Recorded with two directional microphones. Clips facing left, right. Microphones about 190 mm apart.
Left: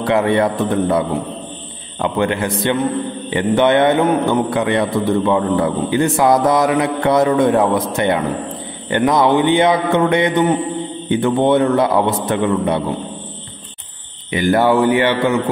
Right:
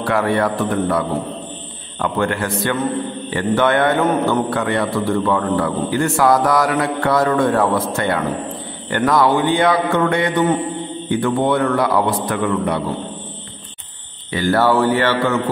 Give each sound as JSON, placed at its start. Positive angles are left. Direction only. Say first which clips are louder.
{"t": 0.0, "sound": "a man's voice", "louder": "left 3 dB", "side_deg": 20}
{"t": 14.3, "sound": "a man's voice", "louder": "left 2 dB", "side_deg": 15}